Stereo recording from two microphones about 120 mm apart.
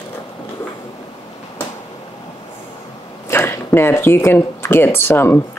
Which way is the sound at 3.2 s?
20° left (ahead or behind).